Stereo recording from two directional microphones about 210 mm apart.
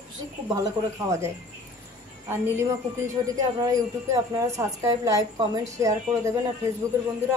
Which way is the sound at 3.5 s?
15° right (ahead or behind).